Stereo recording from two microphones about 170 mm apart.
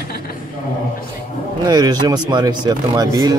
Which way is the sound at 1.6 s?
25° right (ahead or behind).